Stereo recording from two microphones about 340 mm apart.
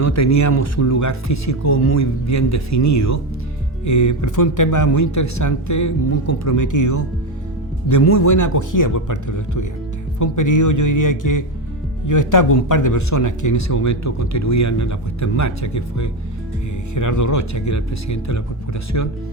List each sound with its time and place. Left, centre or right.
0.0 s speech: left
8.0 s speech: left
8.3 s speech: left